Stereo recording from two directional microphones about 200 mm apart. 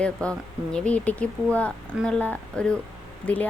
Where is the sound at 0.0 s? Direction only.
5° left (ahead or behind).